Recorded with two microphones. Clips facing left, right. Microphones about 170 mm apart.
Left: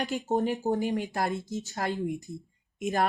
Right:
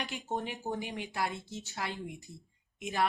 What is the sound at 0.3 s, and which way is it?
Speech, 40° left (ahead or behind).